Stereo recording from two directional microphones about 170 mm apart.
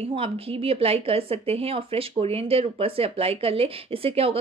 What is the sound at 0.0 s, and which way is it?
A woman's voice, 35° right (ahead or behind).